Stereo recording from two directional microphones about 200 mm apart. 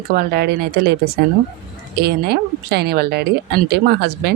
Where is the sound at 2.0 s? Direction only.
55° right (ahead or behind).